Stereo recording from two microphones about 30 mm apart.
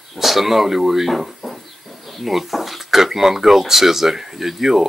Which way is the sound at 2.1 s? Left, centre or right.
Centre.